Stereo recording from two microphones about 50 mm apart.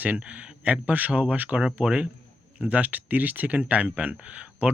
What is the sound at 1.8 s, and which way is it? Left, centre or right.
Speech, centre.